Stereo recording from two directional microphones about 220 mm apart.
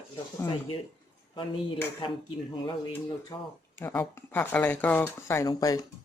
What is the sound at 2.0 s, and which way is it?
Speech, 25° left (ahead or behind).